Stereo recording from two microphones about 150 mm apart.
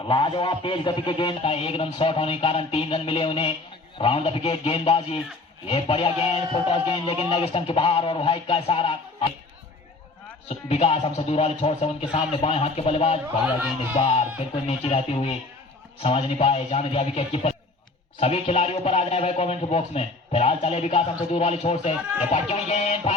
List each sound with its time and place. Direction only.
0.1 s a man's voice: 35° left (ahead or behind)
10.5 s speech: 40° left (ahead or behind)
13.4 s speech: 10° right (ahead or behind)
13.9 s speech: 45° left (ahead or behind)